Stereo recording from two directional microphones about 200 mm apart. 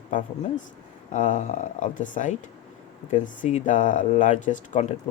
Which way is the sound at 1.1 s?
40° left (ahead or behind).